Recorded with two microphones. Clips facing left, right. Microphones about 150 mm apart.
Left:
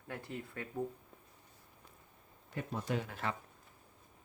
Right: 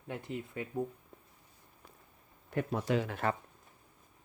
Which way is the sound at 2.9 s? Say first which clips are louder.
Right 4 dB; 80° right.